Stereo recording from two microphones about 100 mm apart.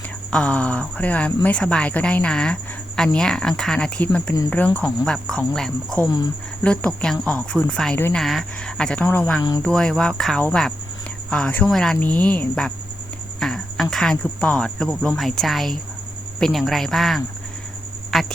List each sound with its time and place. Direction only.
0.3 s a woman's voice: 10° left (ahead or behind)
9.0 s speech: 20° left (ahead or behind)
9.6 s a woman's voice: 5° left (ahead or behind)
13.4 s insect: 5° left (ahead or behind)
13.9 s speech: 5° left (ahead or behind)